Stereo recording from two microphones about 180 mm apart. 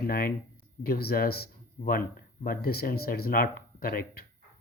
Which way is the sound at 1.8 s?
45° left (ahead or behind).